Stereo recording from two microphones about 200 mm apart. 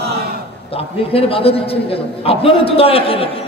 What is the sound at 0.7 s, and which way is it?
A man's voice, 30° left (ahead or behind).